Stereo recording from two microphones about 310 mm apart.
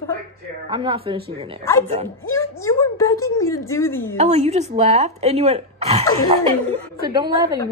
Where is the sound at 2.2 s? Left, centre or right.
Centre.